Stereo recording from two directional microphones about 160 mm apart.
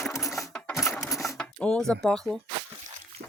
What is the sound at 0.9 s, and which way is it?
Mechanisms, 20° left (ahead or behind).